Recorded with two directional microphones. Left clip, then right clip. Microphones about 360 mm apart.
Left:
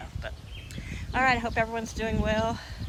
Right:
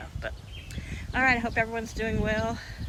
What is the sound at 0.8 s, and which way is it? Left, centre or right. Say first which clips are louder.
Speech: even; centre.